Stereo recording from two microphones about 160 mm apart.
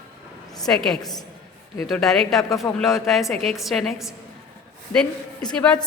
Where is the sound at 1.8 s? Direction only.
Centre (ahead or behind).